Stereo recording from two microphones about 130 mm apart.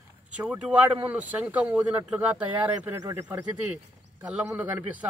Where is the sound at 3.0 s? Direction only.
25° right (ahead or behind).